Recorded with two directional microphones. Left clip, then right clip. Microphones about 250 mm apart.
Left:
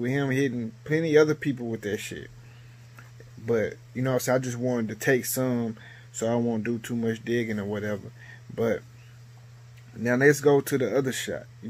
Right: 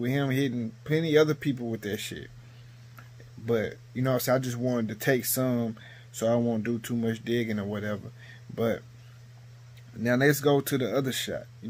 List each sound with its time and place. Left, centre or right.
0.0 s speech: centre
3.4 s speech: centre
10.0 s speech: centre